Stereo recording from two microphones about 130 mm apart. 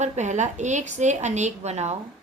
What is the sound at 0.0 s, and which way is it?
A woman's voice, 65° right (ahead or behind).